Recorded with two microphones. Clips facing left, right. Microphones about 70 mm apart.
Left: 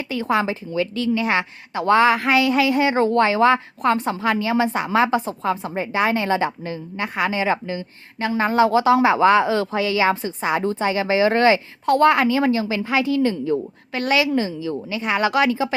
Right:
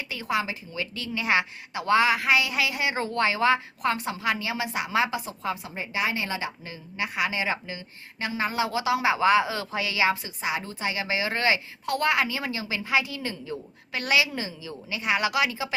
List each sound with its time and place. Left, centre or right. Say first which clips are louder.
0.1 s a woman's voice: left 7 dB; left
1.7 s a woman's voice: left 6 dB; left